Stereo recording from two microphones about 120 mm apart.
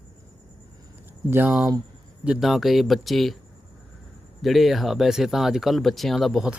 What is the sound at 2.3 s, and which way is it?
Speech, centre (ahead or behind).